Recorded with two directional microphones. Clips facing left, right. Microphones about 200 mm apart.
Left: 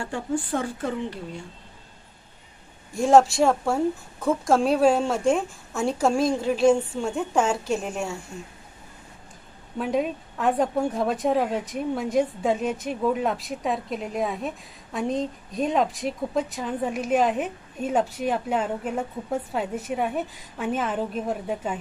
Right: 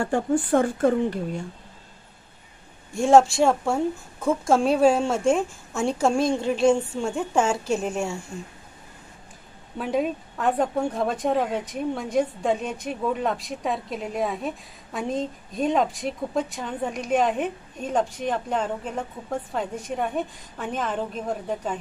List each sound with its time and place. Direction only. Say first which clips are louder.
0.0 s speech: right 5 dB; 50° right (ahead or behind)
2.9 s a woman's voice: right 1 dB; centre (ahead or behind)
9.8 s a woman's voice: even; centre (ahead or behind)